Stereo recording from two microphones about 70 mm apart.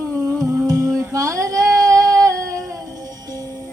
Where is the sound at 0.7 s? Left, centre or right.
Right.